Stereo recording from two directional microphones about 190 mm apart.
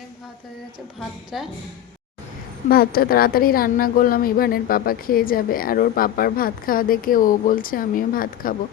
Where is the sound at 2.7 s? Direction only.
50° left (ahead or behind).